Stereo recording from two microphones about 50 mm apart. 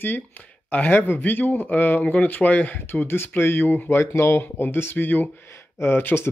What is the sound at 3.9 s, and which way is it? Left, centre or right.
Speech, left.